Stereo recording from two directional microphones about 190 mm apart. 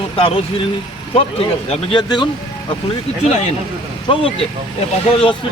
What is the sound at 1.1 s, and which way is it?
Speech, 30° left (ahead or behind).